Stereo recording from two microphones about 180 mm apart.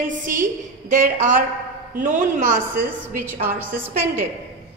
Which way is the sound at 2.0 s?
40° right (ahead or behind).